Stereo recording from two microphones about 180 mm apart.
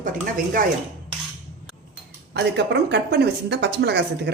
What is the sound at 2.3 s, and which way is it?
Speech, 70° right (ahead or behind).